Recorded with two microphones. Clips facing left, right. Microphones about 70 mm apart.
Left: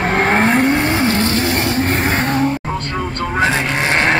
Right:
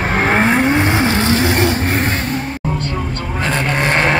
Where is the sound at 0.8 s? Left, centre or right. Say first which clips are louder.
Right 1 dB; centre.